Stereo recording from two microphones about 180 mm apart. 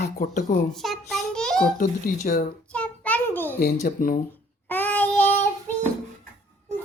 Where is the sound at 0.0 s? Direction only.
45° left (ahead or behind).